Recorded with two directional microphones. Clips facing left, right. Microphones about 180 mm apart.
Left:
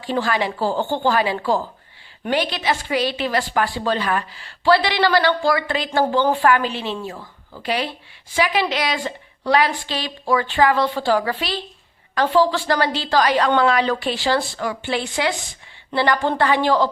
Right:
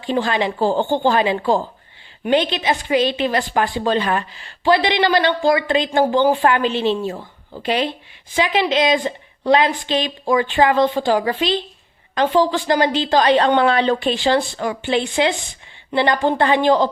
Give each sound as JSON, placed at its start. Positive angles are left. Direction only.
{"t": 0.0, "sound": "a woman's voice", "side_deg": -20}